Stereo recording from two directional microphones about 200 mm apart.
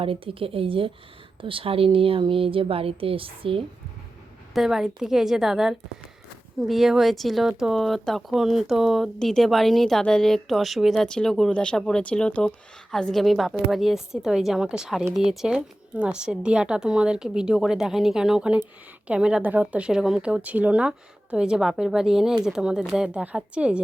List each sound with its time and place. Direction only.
0.0 s speech: 25° right (ahead or behind)
4.5 s speech: centre (ahead or behind)